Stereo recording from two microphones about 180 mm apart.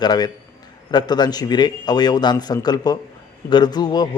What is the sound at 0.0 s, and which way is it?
A man's voice, 25° left (ahead or behind).